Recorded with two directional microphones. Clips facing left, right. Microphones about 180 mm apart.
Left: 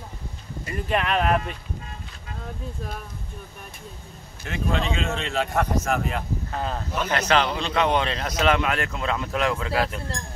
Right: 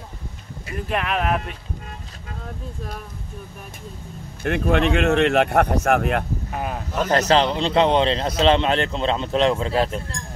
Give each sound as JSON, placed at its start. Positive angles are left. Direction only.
{"t": 0.7, "sound": "speech", "side_deg": 0}
{"t": 4.4, "sound": "speech", "side_deg": -60}
{"t": 6.5, "sound": "speech", "side_deg": -15}
{"t": 7.0, "sound": "a man's voice", "side_deg": -40}